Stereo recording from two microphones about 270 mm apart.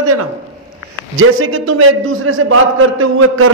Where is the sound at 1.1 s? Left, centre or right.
Right.